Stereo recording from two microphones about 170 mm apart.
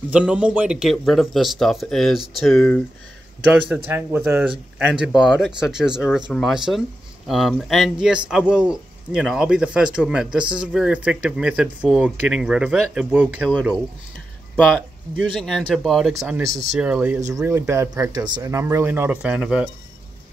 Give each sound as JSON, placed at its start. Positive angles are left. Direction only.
{"t": 0.1, "sound": "speech", "side_deg": -5}
{"t": 2.5, "sound": "speech", "side_deg": 10}
{"t": 3.6, "sound": "speech", "side_deg": -10}
{"t": 15.4, "sound": "speech", "side_deg": 0}
{"t": 16.1, "sound": "speech", "side_deg": -15}
{"t": 17.3, "sound": "speech", "side_deg": -20}